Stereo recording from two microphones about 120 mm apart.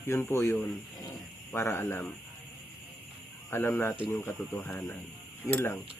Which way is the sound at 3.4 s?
20° left (ahead or behind).